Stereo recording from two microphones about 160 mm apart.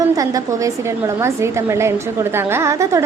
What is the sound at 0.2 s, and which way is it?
A woman's voice, 20° right (ahead or behind).